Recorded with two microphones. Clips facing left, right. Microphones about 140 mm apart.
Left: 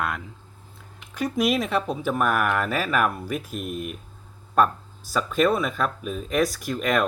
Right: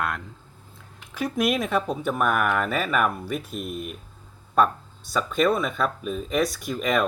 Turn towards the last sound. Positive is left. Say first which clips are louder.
# even
turn(degrees=0)  # may be behind; listen again after turning